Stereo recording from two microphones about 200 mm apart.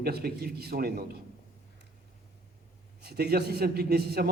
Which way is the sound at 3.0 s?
55° right (ahead or behind).